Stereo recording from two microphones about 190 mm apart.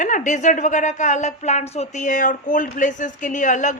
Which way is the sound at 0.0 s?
40° left (ahead or behind).